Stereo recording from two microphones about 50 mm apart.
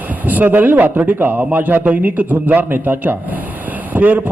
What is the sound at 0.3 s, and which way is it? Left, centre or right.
A man's voice, right.